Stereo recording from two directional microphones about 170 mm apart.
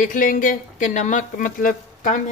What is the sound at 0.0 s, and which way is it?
Speech, 50° left (ahead or behind).